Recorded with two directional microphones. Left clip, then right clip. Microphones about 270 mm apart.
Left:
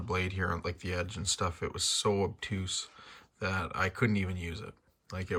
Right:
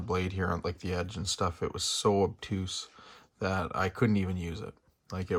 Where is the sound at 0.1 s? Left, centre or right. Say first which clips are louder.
Right 1 dB; centre.